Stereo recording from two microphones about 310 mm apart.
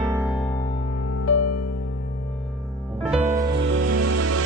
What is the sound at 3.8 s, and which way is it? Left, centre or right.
Music, right.